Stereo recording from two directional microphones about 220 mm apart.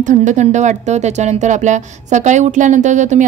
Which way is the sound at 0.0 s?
35° right (ahead or behind).